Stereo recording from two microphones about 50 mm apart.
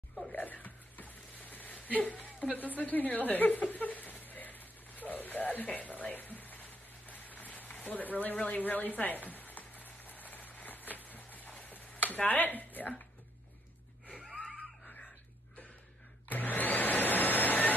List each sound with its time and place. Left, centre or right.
0.3 s a sound: left
7.8 s speech: left
8.5 s a sound: left
12.3 s speech: left
14.3 s wheeze: centre
16.3 s vacuum cleaner: left